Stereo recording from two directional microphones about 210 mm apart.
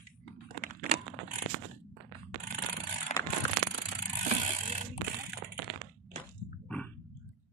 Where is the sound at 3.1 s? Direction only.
35° left (ahead or behind).